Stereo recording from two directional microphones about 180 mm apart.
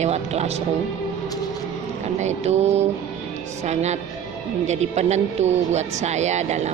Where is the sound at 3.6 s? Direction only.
40° right (ahead or behind).